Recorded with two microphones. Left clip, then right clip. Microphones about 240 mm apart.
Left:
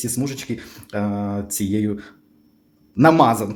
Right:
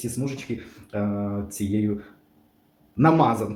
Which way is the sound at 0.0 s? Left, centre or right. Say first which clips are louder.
Left 4 dB; left.